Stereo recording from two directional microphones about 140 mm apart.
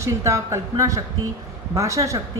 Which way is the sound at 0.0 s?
20° right (ahead or behind).